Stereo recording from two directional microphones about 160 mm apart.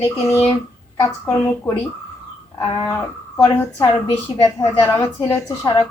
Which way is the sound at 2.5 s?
20° left (ahead or behind).